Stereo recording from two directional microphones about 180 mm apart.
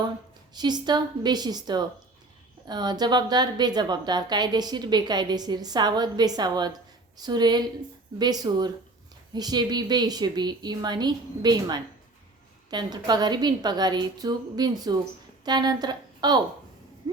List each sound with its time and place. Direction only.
0.5 s a woman's voice: 25° right (ahead or behind)